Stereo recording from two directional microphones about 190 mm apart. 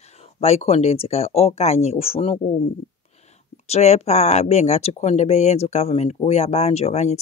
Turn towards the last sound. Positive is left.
turn(degrees=35)  # may be behind; listen again after turning